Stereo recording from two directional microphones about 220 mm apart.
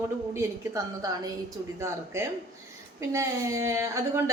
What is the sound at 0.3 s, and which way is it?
A woman's voice, 15° right (ahead or behind).